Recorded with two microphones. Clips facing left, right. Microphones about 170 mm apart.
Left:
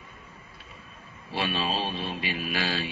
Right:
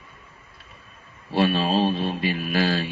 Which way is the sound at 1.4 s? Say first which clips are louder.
Right 8 dB; 45° right (ahead or behind).